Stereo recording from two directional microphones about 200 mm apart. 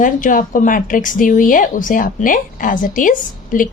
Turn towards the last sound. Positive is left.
turn(degrees=40)  # may be behind; listen again after turning